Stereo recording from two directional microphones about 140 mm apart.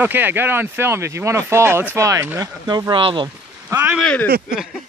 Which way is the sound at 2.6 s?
30° right (ahead or behind).